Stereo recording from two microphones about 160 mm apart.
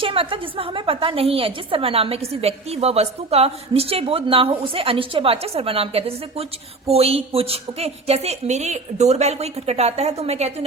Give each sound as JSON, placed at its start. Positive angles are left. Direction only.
{"t": 0.0, "sound": "a woman's voice", "side_deg": -35}